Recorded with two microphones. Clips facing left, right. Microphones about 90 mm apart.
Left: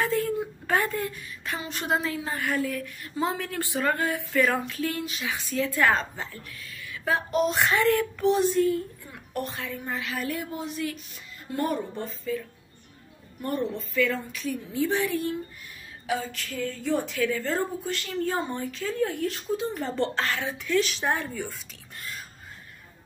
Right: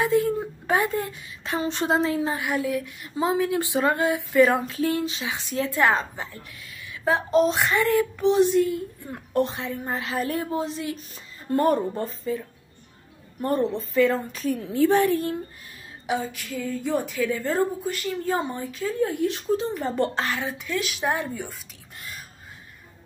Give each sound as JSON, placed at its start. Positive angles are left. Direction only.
{"t": 0.0, "sound": "a sound", "side_deg": -20}
{"t": 0.7, "sound": "a woman's voice", "side_deg": -15}
{"t": 7.5, "sound": "speech", "side_deg": 0}
{"t": 8.2, "sound": "a woman's voice", "side_deg": -20}
{"t": 11.5, "sound": "a woman's voice", "side_deg": -45}
{"t": 13.4, "sound": "a woman's voice", "side_deg": -35}
{"t": 14.6, "sound": "a woman's voice", "side_deg": -55}
{"t": 16.3, "sound": "speech", "side_deg": -10}
{"t": 17.6, "sound": "speech", "side_deg": -5}
{"t": 21.3, "sound": "a woman's voice", "side_deg": -20}